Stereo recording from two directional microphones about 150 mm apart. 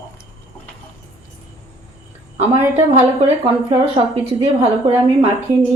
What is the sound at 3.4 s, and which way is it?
A woman's voice, 40° right (ahead or behind).